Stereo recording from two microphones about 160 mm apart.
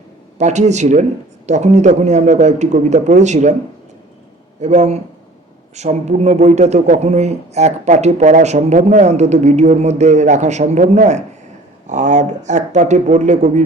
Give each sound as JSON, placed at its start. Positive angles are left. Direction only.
{"t": 0.3, "sound": "a man's voice", "side_deg": -45}
{"t": 4.6, "sound": "a man's voice", "side_deg": -45}